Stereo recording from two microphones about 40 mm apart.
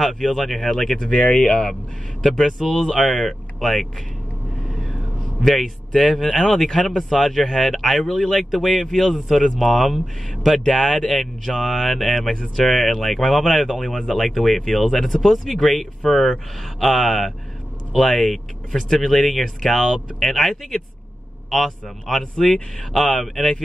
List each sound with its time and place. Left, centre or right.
0.0 s speech: centre
1.0 s speech: left
1.4 s speech: centre
5.4 s speech: centre
22.2 s speech: centre
23.1 s speech: centre